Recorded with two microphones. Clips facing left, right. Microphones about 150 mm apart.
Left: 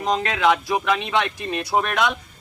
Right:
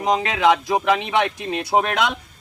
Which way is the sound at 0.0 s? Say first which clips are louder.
Right 2 dB; 15° right (ahead or behind).